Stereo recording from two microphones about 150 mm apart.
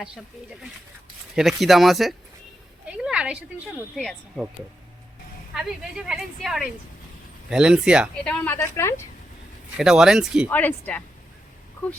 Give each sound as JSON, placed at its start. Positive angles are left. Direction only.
{"t": 1.4, "sound": "a woman's voice", "side_deg": 0}
{"t": 2.8, "sound": "a sound", "side_deg": -5}
{"t": 3.9, "sound": "a woman's voice", "side_deg": 0}
{"t": 5.5, "sound": "a woman's voice", "side_deg": -5}
{"t": 8.2, "sound": "speech", "side_deg": 5}
{"t": 8.5, "sound": "a woman's voice", "side_deg": 20}
{"t": 9.7, "sound": "a woman's voice", "side_deg": -5}
{"t": 10.5, "sound": "speech", "side_deg": 10}